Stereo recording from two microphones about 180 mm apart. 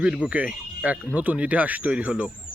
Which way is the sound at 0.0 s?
5° right (ahead or behind).